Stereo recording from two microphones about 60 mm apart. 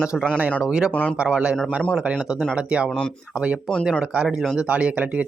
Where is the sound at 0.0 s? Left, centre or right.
Centre.